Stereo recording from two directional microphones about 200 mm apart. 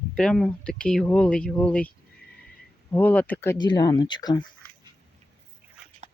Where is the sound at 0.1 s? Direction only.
5° left (ahead or behind).